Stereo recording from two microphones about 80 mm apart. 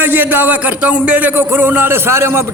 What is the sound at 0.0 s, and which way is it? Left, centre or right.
Speech, right.